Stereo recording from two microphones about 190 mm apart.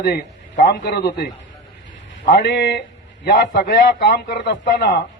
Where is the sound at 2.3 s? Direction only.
65° left (ahead or behind).